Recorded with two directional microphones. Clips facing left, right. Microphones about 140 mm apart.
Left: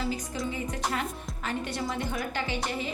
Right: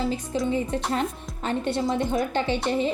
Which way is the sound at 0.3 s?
25° right (ahead or behind).